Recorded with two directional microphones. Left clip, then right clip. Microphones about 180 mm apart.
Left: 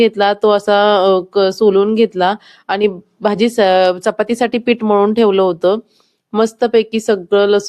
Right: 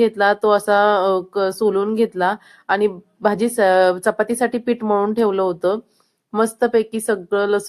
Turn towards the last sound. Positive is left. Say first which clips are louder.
# left 7 dB
turn(degrees=25)  # may be behind; listen again after turning